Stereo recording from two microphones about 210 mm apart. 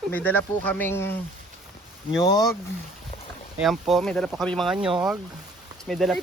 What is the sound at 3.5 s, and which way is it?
Speech, centre (ahead or behind).